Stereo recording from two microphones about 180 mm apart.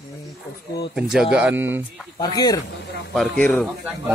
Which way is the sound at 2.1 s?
20° left (ahead or behind).